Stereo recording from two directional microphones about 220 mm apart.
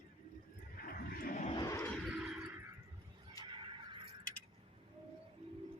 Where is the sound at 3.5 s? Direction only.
20° right (ahead or behind).